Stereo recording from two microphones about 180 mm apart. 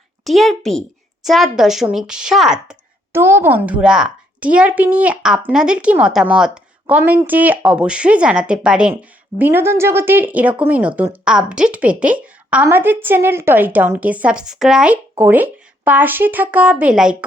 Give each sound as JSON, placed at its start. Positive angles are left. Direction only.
{"t": 0.3, "sound": "a woman's voice", "side_deg": 0}